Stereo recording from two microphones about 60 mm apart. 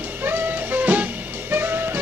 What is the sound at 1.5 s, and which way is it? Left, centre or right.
Music, right.